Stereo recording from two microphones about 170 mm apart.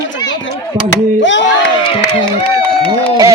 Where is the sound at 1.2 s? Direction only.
90° left.